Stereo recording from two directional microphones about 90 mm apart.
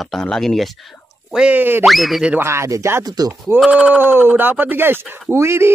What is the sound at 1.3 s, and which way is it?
Speech, 10° right (ahead or behind).